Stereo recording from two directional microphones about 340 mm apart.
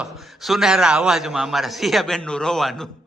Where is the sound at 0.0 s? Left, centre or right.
Centre.